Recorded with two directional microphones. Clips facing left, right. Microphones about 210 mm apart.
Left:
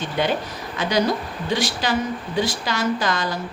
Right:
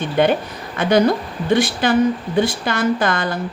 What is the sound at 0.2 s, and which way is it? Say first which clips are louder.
Speech: right 6 dB; 55° right (ahead or behind).